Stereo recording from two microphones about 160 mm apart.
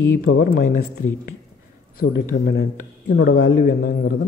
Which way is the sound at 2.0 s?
65° left (ahead or behind).